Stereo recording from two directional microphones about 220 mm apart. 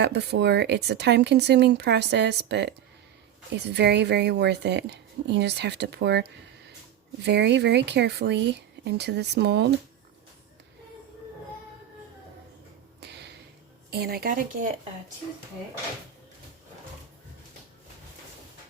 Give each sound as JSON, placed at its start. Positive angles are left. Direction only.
{"t": 0.0, "sound": "speech", "side_deg": -50}
{"t": 7.3, "sound": "speech", "side_deg": -50}
{"t": 13.0, "sound": "a sound", "side_deg": -50}
{"t": 13.9, "sound": "speech", "side_deg": -45}